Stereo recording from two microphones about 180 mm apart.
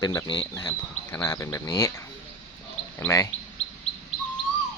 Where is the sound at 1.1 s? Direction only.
15° left (ahead or behind).